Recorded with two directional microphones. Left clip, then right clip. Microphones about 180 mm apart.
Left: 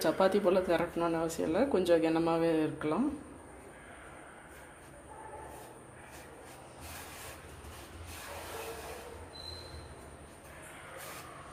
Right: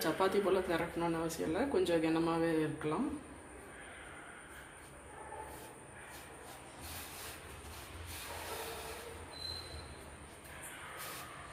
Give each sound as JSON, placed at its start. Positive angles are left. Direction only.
{"t": 0.0, "sound": "speech", "side_deg": 55}